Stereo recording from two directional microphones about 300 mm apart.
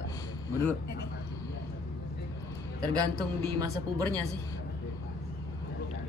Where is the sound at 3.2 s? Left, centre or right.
Centre.